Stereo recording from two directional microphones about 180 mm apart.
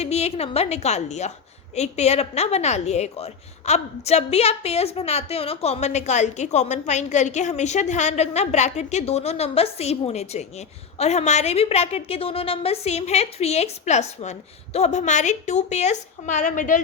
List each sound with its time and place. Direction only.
0.0 s a woman's voice: 35° left (ahead or behind)